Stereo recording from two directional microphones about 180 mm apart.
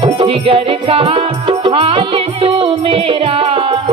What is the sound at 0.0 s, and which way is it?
Music, 30° right (ahead or behind).